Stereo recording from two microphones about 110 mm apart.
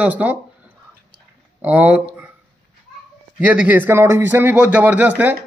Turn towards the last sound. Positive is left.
turn(degrees=-15)  # may be behind; listen again after turning